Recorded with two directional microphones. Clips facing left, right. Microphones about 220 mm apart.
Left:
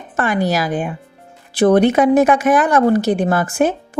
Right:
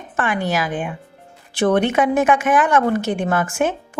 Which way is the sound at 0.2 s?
40° left (ahead or behind).